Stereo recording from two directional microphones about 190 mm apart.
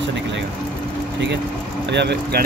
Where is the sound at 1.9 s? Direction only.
60° right (ahead or behind).